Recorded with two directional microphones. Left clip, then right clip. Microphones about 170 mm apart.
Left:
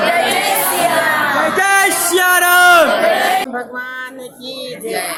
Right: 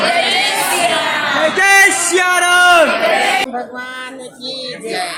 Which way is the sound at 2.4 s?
25° right (ahead or behind).